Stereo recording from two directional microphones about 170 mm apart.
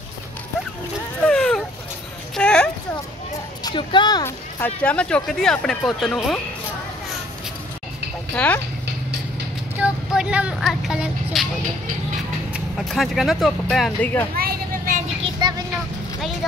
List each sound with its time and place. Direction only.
1.2 s a sound: 5° left (ahead or behind)
3.6 s speech: 25° left (ahead or behind)
4.6 s speech: 10° left (ahead or behind)
8.4 s speech: 5° left (ahead or behind)
9.8 s speech: 5° right (ahead or behind)
12.5 s speech: centre (ahead or behind)
14.3 s a sound: 55° right (ahead or behind)
15.4 s vehicle: 25° right (ahead or behind)